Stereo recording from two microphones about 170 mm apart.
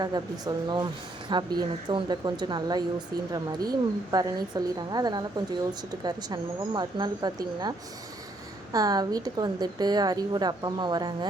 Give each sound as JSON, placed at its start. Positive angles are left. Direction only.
{"t": 0.0, "sound": "a woman's voice", "side_deg": -25}
{"t": 8.7, "sound": "a woman's voice", "side_deg": -20}